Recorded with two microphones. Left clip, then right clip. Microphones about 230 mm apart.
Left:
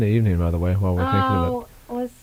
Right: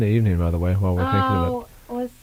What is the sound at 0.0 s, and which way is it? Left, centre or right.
A woman's voice, right.